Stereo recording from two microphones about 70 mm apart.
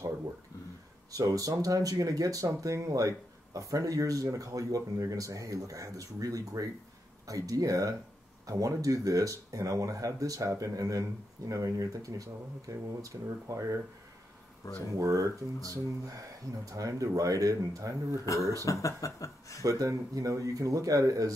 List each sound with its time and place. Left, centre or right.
1.1 s speech: right
14.6 s speech: left
15.0 s speech: right
18.6 s speech: left
19.6 s speech: right